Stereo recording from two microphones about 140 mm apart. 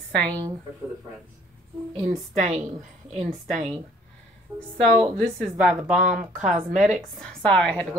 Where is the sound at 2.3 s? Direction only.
60° right (ahead or behind).